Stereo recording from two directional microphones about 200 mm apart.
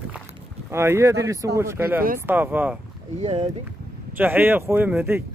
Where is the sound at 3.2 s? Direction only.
30° right (ahead or behind).